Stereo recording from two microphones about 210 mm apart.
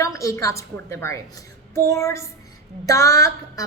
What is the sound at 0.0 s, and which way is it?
A woman's voice, 15° left (ahead or behind).